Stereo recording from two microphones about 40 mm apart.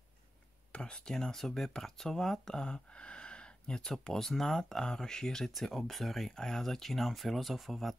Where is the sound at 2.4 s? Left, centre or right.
Centre.